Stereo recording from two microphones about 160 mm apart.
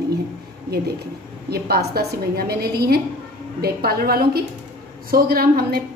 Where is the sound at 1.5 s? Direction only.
75° right (ahead or behind).